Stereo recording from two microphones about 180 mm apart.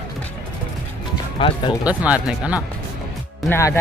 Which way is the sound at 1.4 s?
30° left (ahead or behind).